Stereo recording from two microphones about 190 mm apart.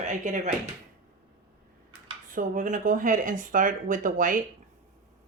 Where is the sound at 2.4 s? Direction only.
45° right (ahead or behind).